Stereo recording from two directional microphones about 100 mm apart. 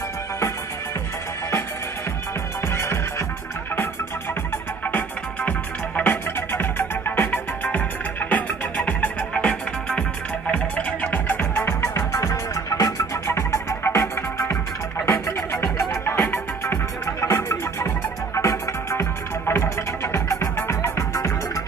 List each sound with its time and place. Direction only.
2.7 s music: 25° left (ahead or behind)
5.9 s music: 20° left (ahead or behind)
15.0 s music: 30° left (ahead or behind)